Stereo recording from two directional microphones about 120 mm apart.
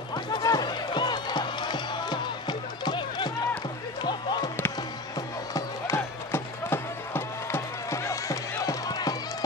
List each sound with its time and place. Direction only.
0.1 s music: 35° left (ahead or behind)
5.5 s music: 20° left (ahead or behind)